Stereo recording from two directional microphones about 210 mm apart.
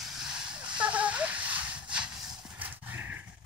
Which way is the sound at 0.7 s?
5° right (ahead or behind).